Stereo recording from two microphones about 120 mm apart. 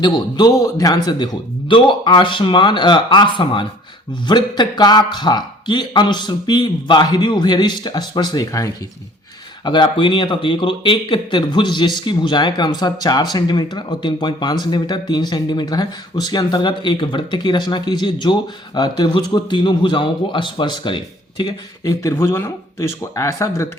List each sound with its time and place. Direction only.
0.0 s speech: 35° left (ahead or behind)